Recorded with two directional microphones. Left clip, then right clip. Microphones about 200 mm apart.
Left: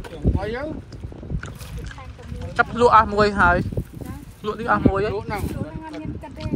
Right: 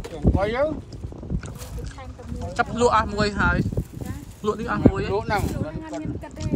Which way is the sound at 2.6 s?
10° right (ahead or behind).